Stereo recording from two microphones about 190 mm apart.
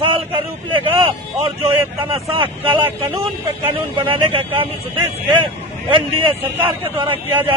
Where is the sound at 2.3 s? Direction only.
30° right (ahead or behind).